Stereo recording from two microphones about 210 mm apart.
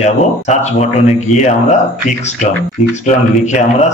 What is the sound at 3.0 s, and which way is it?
Speech, 35° left (ahead or behind).